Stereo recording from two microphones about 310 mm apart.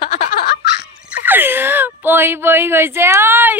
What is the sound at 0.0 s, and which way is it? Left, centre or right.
Laughter, centre.